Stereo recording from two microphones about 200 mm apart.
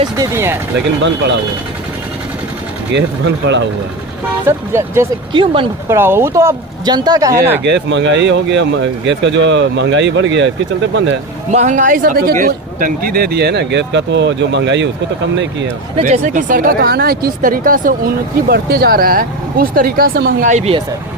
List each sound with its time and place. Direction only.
0.2 s speech: 10° right (ahead or behind)
2.9 s speech: 60° right (ahead or behind)
4.4 s speech: 15° right (ahead or behind)
5.3 s speech: 25° right (ahead or behind)
5.9 s speech: 10° right (ahead or behind)
7.6 s speech: 60° right (ahead or behind)
11.5 s speech: 35° right (ahead or behind); by 14.8 s 60° right (ahead or behind)
16.0 s speech: 35° right (ahead or behind); by 20.5 s 50° right (ahead or behind)
20.5 s speech: 30° right (ahead or behind)